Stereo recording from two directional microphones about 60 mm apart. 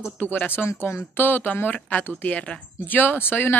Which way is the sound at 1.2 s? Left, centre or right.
Left.